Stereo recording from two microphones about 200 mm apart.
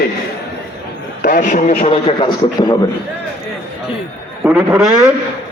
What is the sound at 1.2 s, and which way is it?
A man's voice, 45° left (ahead or behind).